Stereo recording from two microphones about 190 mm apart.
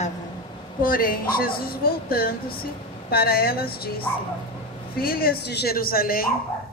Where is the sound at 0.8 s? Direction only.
50° left (ahead or behind).